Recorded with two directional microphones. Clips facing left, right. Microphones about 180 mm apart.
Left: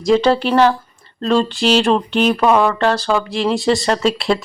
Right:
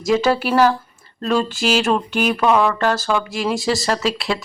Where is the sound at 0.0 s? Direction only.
5° right (ahead or behind).